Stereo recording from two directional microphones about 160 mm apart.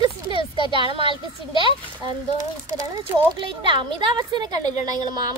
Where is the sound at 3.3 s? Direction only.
30° right (ahead or behind).